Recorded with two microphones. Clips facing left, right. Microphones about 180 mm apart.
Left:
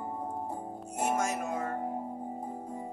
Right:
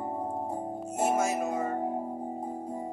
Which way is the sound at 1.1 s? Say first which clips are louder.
Right 3 dB; 5° right (ahead or behind).